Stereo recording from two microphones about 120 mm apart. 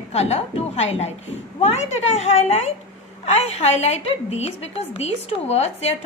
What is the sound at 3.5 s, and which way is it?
A woman's voice, 65° left (ahead or behind).